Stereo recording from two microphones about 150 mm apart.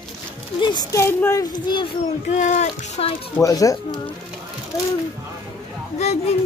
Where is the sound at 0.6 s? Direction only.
30° left (ahead or behind).